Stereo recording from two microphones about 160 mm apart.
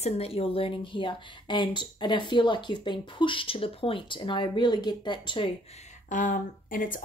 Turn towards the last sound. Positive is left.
turn(degrees=60)  # may be behind; listen again after turning